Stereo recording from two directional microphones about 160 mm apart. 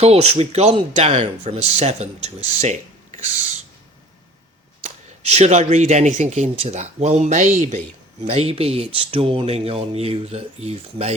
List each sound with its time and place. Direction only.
0.0 s speech: 40° right (ahead or behind)
5.3 s speech: 45° right (ahead or behind)